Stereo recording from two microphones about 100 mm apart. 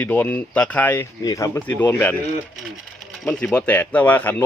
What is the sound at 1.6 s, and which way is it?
Speech, 20° left (ahead or behind).